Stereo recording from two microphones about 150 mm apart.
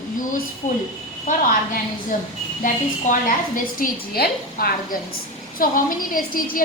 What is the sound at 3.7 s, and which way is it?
A woman's voice, 85° left.